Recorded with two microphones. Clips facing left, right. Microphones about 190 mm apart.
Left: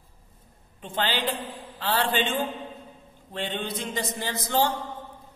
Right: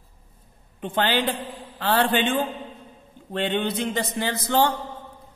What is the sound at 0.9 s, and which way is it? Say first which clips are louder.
A man's voice: right 4 dB; 55° right (ahead or behind).